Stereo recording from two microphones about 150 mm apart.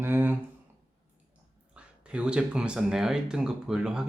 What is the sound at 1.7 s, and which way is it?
Speech, 5° right (ahead or behind).